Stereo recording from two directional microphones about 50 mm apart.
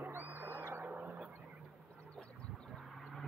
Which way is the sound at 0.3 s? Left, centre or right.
Right.